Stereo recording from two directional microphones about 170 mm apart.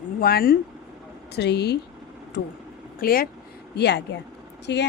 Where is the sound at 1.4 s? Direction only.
75° left (ahead or behind).